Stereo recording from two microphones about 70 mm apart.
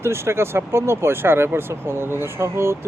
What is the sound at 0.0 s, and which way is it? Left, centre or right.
Speech, right.